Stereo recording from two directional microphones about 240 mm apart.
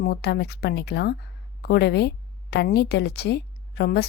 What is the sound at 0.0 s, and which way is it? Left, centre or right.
A woman's voice, left.